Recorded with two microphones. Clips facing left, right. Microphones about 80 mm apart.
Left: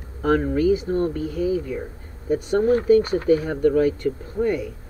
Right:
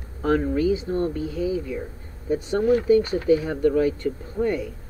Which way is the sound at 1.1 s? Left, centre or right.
Right.